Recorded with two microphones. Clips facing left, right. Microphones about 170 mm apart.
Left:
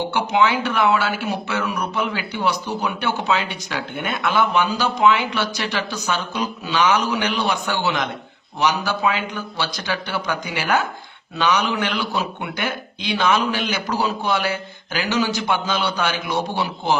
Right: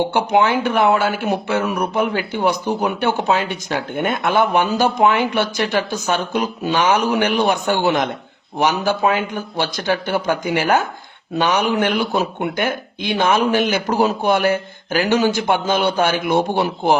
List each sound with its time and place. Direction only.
0.1 s speech: 55° right (ahead or behind)